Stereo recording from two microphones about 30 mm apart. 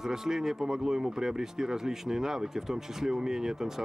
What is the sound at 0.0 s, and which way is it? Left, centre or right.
Speech, centre.